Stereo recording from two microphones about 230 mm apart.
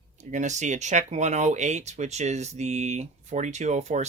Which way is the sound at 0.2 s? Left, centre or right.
Right.